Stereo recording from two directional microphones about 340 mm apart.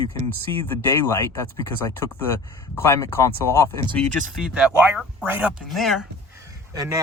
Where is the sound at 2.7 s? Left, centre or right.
Centre.